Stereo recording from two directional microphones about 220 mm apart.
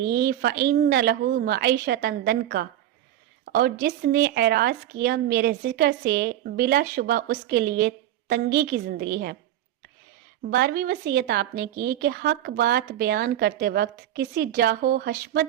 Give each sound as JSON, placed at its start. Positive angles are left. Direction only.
{"t": 0.0, "sound": "speech", "side_deg": -45}
{"t": 10.5, "sound": "speech", "side_deg": -45}